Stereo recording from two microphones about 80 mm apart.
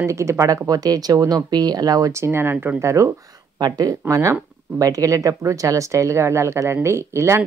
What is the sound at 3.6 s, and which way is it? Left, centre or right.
Speech, right.